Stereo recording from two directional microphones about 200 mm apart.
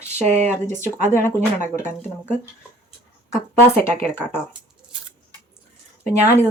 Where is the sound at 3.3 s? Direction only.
10° left (ahead or behind).